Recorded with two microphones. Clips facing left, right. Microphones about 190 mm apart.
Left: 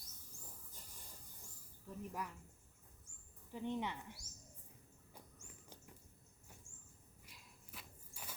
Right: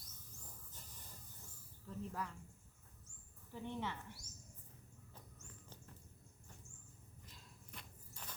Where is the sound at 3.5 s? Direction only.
15° left (ahead or behind).